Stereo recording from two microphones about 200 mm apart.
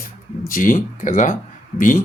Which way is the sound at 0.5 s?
45° left (ahead or behind).